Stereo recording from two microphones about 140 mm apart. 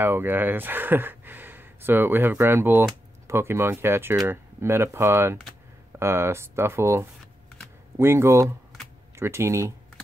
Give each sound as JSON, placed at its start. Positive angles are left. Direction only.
{"t": 0.0, "sound": "speech", "side_deg": -15}